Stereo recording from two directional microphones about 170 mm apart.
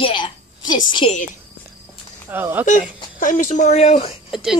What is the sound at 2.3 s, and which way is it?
Wail, 15° right (ahead or behind).